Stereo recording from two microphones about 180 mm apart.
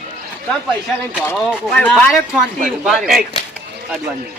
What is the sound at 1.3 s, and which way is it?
A man's voice, centre (ahead or behind).